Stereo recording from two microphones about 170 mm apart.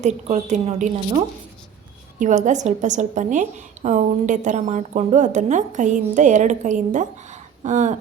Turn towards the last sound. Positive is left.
turn(degrees=-45)  # may be behind; listen again after turning